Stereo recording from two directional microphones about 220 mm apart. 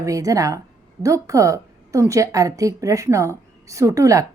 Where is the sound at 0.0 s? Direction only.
15° right (ahead or behind).